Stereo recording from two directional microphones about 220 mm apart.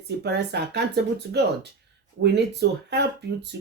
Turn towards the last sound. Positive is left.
turn(degrees=-50)  # may be behind; listen again after turning